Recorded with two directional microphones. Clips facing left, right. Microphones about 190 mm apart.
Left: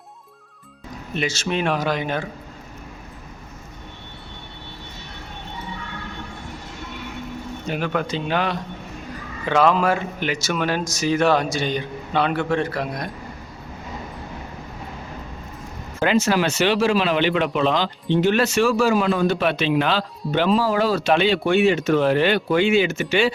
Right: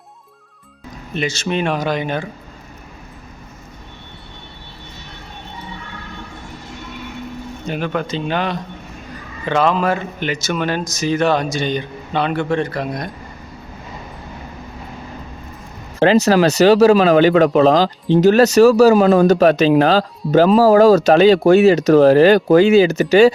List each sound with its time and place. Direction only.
1.1 s speech: 5° left (ahead or behind)
7.7 s speech: 5° left (ahead or behind)
16.0 s speech: 35° right (ahead or behind)